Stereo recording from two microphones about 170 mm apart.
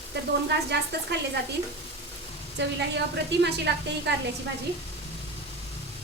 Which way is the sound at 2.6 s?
90° right.